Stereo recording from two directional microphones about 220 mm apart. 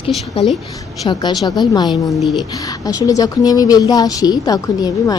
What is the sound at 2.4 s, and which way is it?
Speech, 15° left (ahead or behind).